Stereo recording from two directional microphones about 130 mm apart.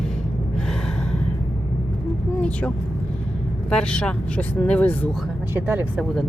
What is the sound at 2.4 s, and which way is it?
Vehicle, 10° left (ahead or behind).